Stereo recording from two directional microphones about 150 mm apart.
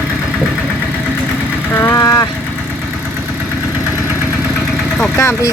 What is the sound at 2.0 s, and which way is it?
Vehicle, 25° left (ahead or behind).